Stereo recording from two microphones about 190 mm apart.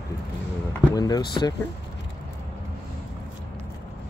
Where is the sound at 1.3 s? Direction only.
25° left (ahead or behind).